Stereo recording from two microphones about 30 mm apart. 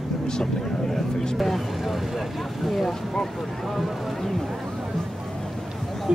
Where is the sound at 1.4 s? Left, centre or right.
Centre.